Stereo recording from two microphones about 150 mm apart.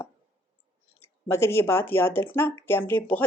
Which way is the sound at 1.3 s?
15° left (ahead or behind).